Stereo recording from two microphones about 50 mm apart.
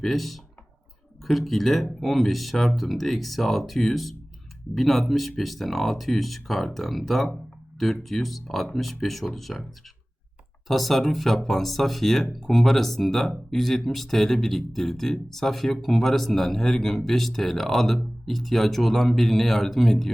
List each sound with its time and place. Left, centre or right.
0.0 s speech: centre
10.7 s speech: centre